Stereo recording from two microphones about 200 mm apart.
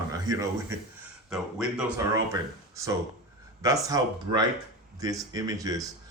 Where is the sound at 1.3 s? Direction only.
5° right (ahead or behind).